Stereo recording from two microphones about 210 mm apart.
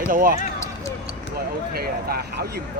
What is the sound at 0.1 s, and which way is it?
Speech, 40° right (ahead or behind).